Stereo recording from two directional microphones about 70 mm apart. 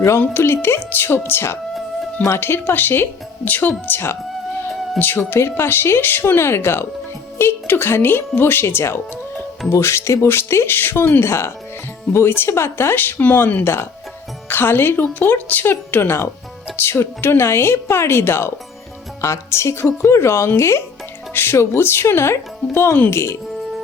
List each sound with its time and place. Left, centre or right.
0.2 s speech: left